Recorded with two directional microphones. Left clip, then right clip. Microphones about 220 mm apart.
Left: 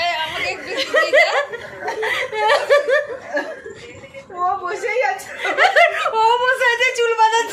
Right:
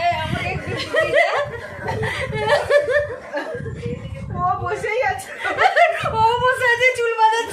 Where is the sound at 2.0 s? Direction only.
35° left (ahead or behind).